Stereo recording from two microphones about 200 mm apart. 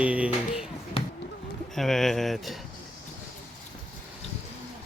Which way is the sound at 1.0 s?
30° left (ahead or behind).